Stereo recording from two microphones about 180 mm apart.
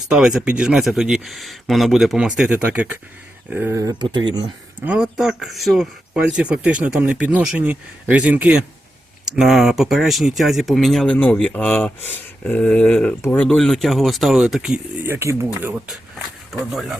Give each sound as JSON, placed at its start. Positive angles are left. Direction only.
{"t": 0.1, "sound": "speech", "side_deg": -5}
{"t": 4.9, "sound": "speech", "side_deg": -5}
{"t": 15.6, "sound": "speech", "side_deg": -5}